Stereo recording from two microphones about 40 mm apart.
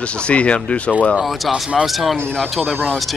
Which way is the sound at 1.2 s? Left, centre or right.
Centre.